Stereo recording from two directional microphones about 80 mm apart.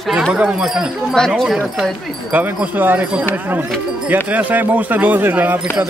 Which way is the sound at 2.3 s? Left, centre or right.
Right.